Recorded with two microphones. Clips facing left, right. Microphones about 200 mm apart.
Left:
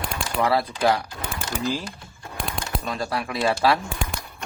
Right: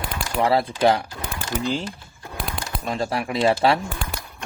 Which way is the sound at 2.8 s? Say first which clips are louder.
Right 5 dB; 25° right (ahead or behind).